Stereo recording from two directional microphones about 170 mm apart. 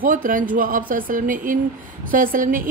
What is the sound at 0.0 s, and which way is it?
A woman's voice, 55° right (ahead or behind).